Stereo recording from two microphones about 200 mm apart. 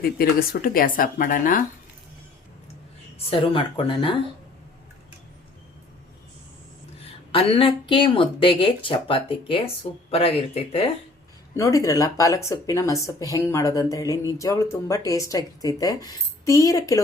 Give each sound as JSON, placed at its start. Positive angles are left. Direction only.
{"t": 0.0, "sound": "speech", "side_deg": 50}
{"t": 3.2, "sound": "speech", "side_deg": 25}
{"t": 7.3, "sound": "speech", "side_deg": 30}
{"t": 11.5, "sound": "speech", "side_deg": 15}